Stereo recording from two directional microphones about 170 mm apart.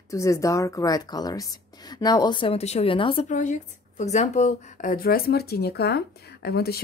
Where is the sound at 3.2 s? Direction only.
45° left (ahead or behind); by 6.8 s 65° left (ahead or behind).